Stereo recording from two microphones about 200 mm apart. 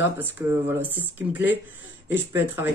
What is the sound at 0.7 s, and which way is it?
Speech, 10° right (ahead or behind).